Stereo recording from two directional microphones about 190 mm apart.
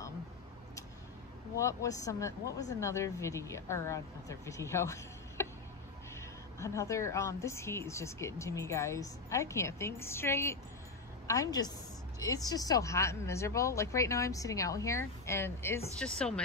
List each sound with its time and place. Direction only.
1.6 s a woman's voice: 15° left (ahead or behind)